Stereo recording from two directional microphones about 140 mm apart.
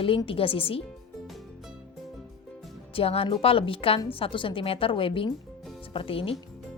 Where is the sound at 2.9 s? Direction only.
40° left (ahead or behind).